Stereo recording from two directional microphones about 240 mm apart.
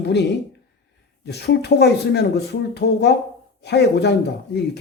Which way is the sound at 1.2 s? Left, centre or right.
Left.